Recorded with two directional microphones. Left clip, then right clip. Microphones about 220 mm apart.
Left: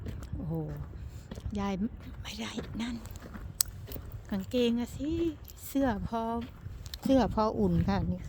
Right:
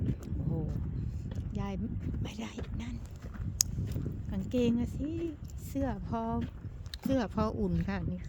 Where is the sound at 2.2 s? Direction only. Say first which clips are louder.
Left 8 dB; 20° left (ahead or behind).